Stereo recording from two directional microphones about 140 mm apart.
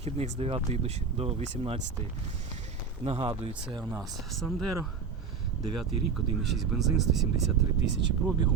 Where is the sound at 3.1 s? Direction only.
45° right (ahead or behind).